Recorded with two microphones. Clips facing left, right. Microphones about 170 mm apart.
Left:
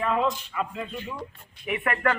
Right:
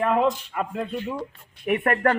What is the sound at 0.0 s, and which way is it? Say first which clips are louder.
A man's voice: right 4 dB; 55° right (ahead or behind).